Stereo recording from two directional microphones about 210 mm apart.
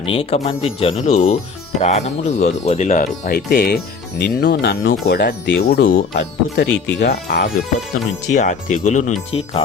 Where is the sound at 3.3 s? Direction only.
50° left (ahead or behind).